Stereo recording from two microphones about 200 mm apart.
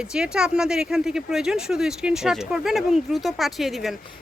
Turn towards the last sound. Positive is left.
turn(degrees=0)  # may be behind; listen again after turning